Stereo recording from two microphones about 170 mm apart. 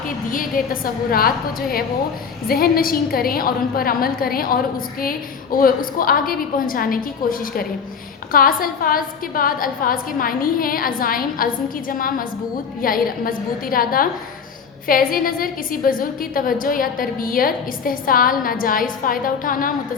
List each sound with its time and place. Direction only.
0.3 s a woman's voice: 55° left (ahead or behind)